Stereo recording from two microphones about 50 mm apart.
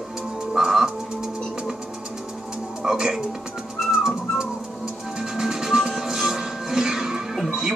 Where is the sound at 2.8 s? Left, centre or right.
Centre.